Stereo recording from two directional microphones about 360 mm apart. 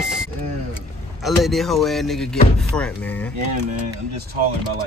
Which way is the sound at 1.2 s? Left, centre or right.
Centre.